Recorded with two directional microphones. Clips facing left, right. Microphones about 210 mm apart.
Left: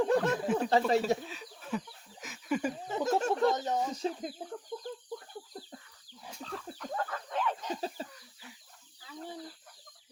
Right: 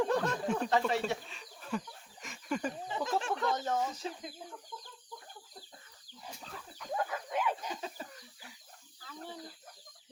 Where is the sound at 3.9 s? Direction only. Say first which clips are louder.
Left 7 dB; 40° left (ahead or behind).